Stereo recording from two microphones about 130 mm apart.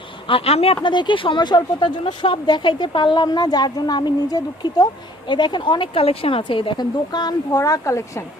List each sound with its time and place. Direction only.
0.3 s speech: 50° left (ahead or behind)
0.8 s speech: 35° left (ahead or behind)